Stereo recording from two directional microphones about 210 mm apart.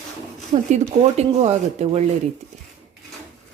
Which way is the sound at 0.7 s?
30° right (ahead or behind).